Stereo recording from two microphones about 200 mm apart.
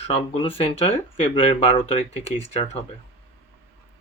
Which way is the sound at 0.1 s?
30° left (ahead or behind).